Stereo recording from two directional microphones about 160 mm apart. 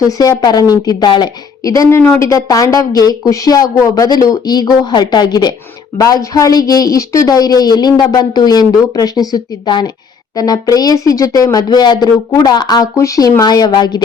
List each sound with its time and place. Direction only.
0.0 s a woman's voice: 20° left (ahead or behind)